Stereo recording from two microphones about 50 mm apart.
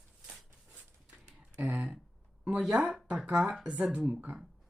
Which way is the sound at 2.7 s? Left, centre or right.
Right.